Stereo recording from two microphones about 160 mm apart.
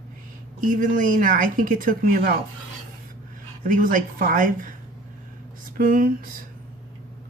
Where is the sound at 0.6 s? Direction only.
55° right (ahead or behind).